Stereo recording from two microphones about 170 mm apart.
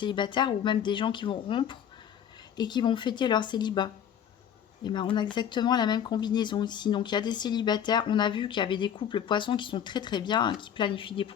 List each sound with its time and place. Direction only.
0.0 s speech: 25° left (ahead or behind)